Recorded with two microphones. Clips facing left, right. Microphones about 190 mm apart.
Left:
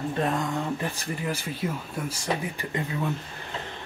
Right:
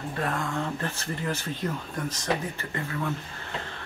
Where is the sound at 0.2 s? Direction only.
20° left (ahead or behind).